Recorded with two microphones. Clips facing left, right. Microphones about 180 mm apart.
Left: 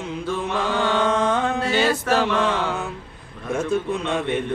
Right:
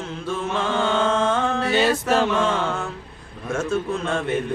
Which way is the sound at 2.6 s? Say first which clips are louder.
Even; 10° left (ahead or behind).